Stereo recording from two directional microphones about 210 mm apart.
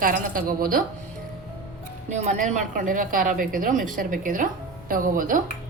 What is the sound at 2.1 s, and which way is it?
Speech, 35° right (ahead or behind).